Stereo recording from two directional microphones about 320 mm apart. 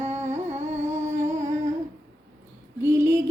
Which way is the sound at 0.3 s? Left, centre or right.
Right.